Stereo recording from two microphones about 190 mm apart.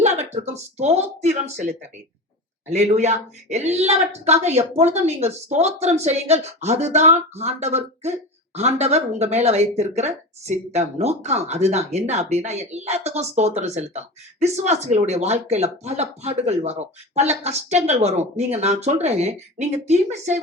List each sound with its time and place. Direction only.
0.0 s speech: 35° right (ahead or behind)